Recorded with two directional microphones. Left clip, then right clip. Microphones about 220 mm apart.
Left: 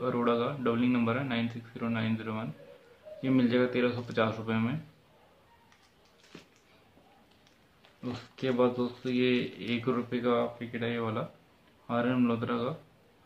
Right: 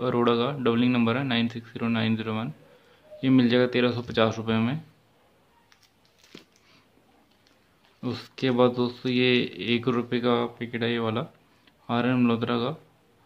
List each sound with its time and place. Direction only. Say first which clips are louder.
0.0 s speech: right 5 dB; 45° right (ahead or behind)
8.0 s speech: right 6 dB; 45° right (ahead or behind)